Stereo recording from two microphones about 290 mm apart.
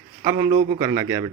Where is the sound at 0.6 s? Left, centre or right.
Centre.